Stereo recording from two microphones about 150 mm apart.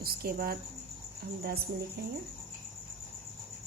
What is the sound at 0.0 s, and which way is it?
Speech, 90° right.